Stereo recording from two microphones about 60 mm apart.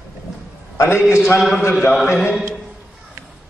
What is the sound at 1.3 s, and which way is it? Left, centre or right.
A man's voice, centre.